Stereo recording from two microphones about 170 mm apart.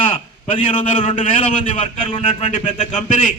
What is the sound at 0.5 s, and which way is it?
A man's voice, 30° left (ahead or behind).